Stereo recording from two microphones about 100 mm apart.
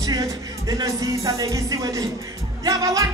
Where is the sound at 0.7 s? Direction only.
35° right (ahead or behind).